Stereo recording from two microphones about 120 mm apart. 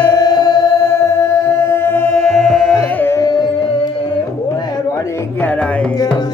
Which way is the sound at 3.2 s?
35° left (ahead or behind).